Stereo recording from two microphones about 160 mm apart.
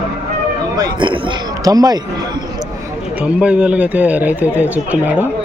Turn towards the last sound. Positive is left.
turn(degrees=-10)  # may be behind; listen again after turning